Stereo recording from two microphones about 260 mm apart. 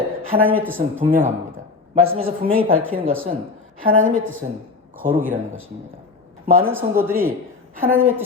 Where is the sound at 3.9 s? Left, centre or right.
Right.